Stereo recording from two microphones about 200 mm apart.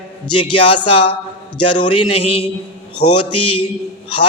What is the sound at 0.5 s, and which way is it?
Speech, 25° left (ahead or behind).